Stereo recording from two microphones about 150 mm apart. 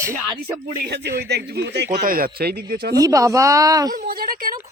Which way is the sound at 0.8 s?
90° right.